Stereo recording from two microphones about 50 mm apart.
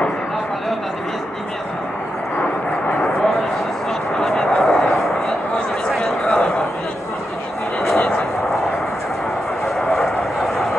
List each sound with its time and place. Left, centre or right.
4.2 s vehicle: centre
5.9 s a sound: centre
7.8 s vehicle: centre
9.8 s vehicle: centre